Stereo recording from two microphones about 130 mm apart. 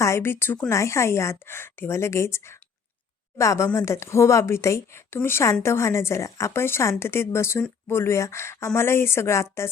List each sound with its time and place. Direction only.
0.0 s a woman's voice: 20° left (ahead or behind)